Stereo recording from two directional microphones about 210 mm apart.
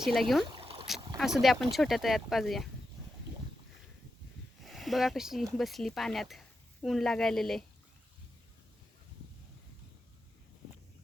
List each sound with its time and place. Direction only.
0.0 s speech: centre (ahead or behind)
0.4 s a sound: 25° right (ahead or behind)
1.2 s speech: centre (ahead or behind)
4.6 s speech: centre (ahead or behind)